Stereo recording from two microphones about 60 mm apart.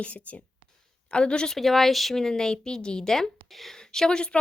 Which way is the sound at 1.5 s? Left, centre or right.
Centre.